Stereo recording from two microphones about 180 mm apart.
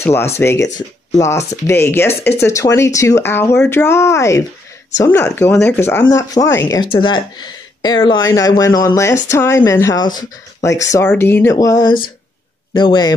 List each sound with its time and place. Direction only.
0.0 s a woman's voice: 15° left (ahead or behind)